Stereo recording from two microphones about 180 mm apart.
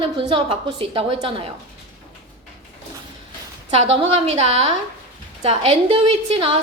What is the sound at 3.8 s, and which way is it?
A woman's voice, 30° right (ahead or behind).